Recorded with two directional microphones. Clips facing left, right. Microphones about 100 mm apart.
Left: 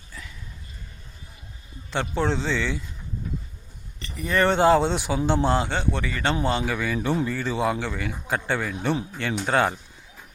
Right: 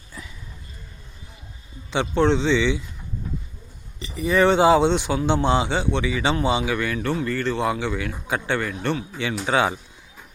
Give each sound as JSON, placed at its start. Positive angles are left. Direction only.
{"t": 0.2, "sound": "a sound", "side_deg": -20}
{"t": 1.9, "sound": "speech", "side_deg": 0}
{"t": 4.0, "sound": "a man's voice", "side_deg": -5}
{"t": 9.1, "sound": "speech", "side_deg": 0}